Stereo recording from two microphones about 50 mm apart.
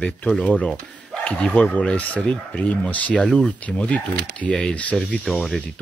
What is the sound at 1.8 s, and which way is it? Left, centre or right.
Speech, left.